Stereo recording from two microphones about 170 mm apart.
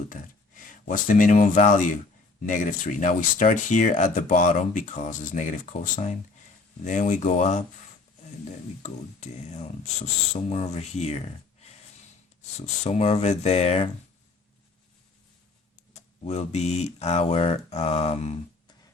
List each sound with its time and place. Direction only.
0.1 s speech: 50° left (ahead or behind)
8.8 s speech: 40° left (ahead or behind)
15.9 s speech: 40° left (ahead or behind)